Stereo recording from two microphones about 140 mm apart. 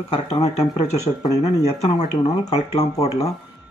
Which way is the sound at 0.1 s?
45° left (ahead or behind).